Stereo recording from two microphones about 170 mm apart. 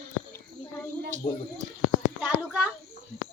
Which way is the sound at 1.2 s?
25° left (ahead or behind).